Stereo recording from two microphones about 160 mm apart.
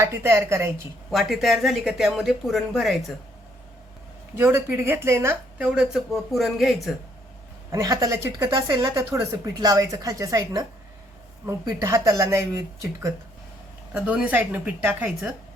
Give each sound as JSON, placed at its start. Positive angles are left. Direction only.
{"t": 0.0, "sound": "speech", "side_deg": -15}
{"t": 1.1, "sound": "speech", "side_deg": 0}
{"t": 4.4, "sound": "speech", "side_deg": -15}
{"t": 7.7, "sound": "speech", "side_deg": -20}